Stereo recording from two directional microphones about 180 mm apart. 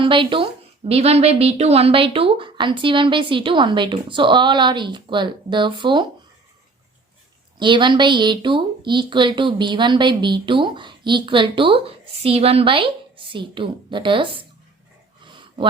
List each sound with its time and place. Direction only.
0.0 s speech: 30° right (ahead or behind)
7.6 s speech: 25° right (ahead or behind)
15.2 s a sound: 25° right (ahead or behind)